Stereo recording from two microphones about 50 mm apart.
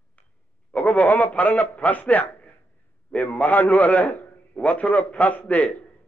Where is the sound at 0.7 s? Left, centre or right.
Left.